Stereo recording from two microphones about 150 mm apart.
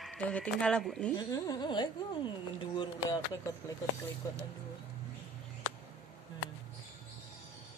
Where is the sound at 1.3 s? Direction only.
30° left (ahead or behind).